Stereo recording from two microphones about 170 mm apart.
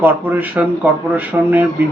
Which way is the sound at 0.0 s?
10° right (ahead or behind).